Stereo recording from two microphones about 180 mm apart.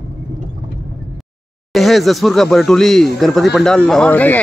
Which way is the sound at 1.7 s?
Centre (ahead or behind).